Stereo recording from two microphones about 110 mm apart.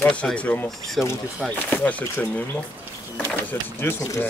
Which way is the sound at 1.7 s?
15° left (ahead or behind).